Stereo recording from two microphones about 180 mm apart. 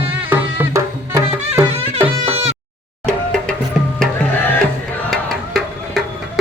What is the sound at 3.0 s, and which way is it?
Music, 5° left (ahead or behind).